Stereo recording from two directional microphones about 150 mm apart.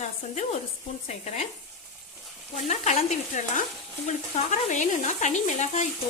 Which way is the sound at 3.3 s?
55° left (ahead or behind).